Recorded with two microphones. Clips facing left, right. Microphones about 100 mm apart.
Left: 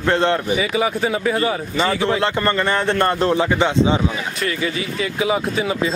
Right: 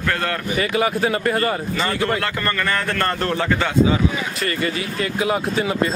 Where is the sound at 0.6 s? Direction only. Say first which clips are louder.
Even; centre (ahead or behind).